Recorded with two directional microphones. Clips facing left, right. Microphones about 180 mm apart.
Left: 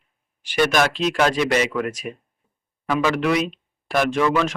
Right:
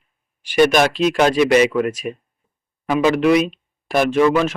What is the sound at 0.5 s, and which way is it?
Speech, 20° right (ahead or behind).